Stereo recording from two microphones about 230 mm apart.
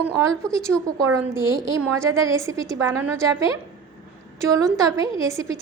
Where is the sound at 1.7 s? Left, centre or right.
Centre.